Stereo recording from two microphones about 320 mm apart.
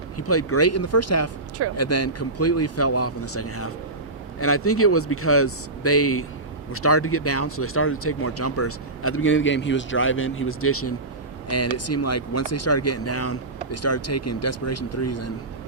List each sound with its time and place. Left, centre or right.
0.2 s speech: left